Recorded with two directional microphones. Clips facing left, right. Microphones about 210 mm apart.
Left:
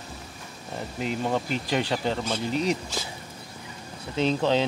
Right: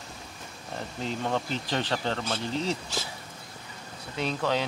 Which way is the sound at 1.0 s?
10° left (ahead or behind).